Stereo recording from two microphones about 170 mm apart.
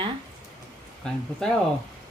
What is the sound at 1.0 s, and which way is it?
Speech, 5° left (ahead or behind).